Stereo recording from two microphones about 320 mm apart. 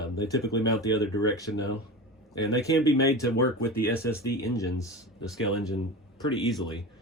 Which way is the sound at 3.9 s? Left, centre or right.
Centre.